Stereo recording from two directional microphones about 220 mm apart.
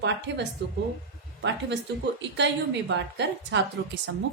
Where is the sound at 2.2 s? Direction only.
55° right (ahead or behind).